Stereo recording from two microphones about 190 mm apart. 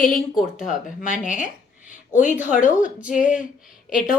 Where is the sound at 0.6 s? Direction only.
40° left (ahead or behind).